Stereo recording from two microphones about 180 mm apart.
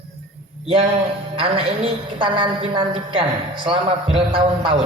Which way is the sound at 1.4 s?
30° right (ahead or behind).